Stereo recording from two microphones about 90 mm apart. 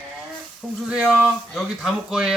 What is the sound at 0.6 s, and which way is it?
Speech, 15° right (ahead or behind).